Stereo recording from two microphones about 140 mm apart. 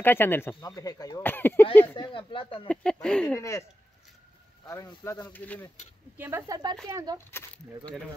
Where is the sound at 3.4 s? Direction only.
20° left (ahead or behind).